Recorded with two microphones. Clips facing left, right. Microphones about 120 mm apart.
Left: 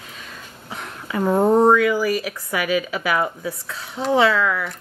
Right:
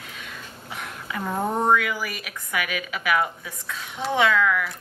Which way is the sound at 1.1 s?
40° left (ahead or behind).